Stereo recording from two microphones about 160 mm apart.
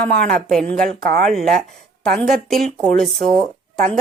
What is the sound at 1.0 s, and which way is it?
Speech, 70° right (ahead or behind).